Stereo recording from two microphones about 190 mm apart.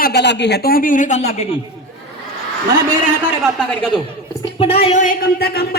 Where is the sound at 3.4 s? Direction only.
Centre (ahead or behind).